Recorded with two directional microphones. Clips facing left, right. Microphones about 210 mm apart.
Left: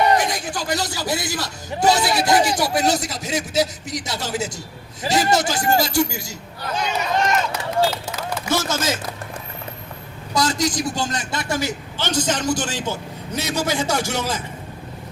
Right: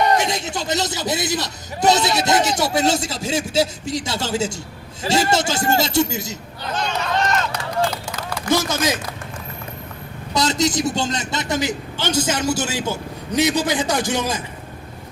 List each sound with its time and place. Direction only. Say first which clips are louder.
0.2 s a man's voice: right 1 dB; 25° right (ahead or behind)
6.7 s speech: even; 10° left (ahead or behind)
8.5 s a man's voice: right 2 dB; 15° right (ahead or behind)
10.3 s a man's voice: right 2 dB; 25° right (ahead or behind)